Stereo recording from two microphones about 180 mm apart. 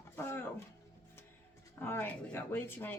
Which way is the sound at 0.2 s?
10° left (ahead or behind).